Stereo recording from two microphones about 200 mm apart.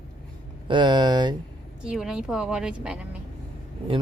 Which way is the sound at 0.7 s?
20° right (ahead or behind).